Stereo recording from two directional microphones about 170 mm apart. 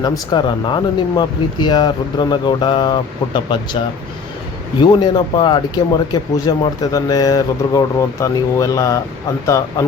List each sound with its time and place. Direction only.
0.0 s speech: 25° left (ahead or behind)
4.8 s speech: 25° left (ahead or behind)